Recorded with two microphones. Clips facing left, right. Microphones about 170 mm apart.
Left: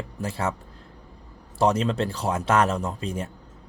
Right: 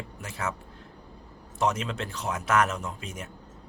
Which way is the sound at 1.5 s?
35° left (ahead or behind).